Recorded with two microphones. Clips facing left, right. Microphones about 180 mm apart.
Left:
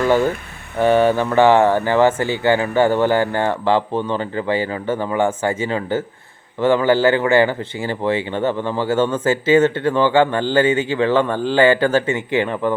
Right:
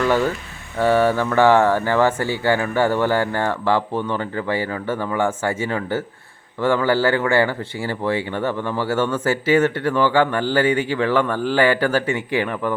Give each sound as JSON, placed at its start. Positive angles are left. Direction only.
{"t": 0.8, "sound": "a man's voice", "side_deg": 20}